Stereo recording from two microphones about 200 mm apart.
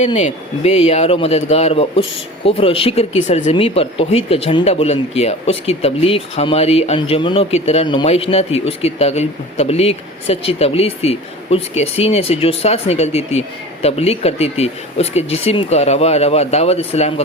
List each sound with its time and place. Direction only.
0.0 s speech: 35° left (ahead or behind)